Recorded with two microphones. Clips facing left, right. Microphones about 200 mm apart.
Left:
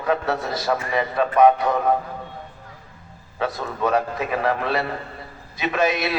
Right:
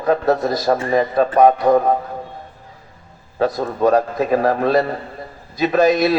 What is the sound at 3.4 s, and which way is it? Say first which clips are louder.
A man's voice: right 7 dB; 40° right (ahead or behind).